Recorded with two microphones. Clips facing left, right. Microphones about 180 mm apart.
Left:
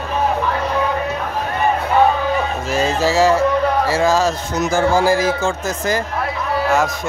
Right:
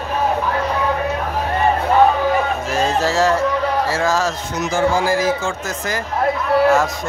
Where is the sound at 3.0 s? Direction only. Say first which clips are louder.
Left 3 dB; 5° left (ahead or behind).